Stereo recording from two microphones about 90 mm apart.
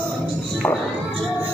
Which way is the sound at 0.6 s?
25° left (ahead or behind).